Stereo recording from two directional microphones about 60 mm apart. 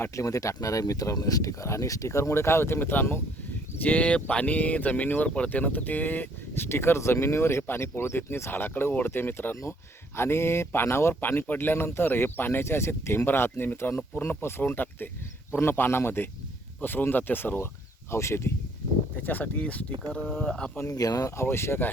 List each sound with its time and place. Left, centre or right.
0.1 s speech: left
3.8 s speech: left
10.2 s speech: left
11.1 s speech: left
18.1 s speech: left
19.1 s speech: left
20.3 s speech: centre
20.9 s speech: left
21.3 s speech: left